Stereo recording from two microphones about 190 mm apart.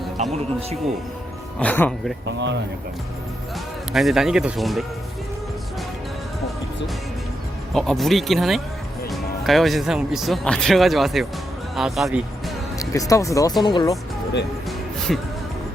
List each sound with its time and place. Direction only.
0.2 s speech: 35° right (ahead or behind)
1.5 s speech: 10° left (ahead or behind)
2.2 s speech: 70° right (ahead or behind)
3.9 s speech: centre (ahead or behind)
7.7 s speech: centre (ahead or behind)
12.8 s speech: 15° left (ahead or behind)
15.1 s speech: centre (ahead or behind)